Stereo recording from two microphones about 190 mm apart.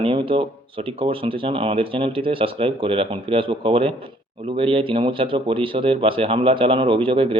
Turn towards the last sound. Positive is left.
turn(degrees=-30)  # may be behind; listen again after turning